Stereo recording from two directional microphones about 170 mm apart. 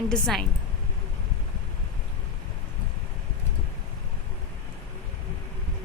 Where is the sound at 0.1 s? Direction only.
Centre (ahead or behind).